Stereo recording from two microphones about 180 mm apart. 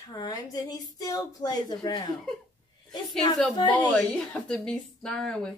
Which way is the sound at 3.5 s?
25° left (ahead or behind).